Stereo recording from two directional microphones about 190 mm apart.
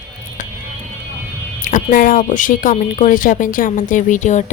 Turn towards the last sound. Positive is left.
turn(degrees=40)  # may be behind; listen again after turning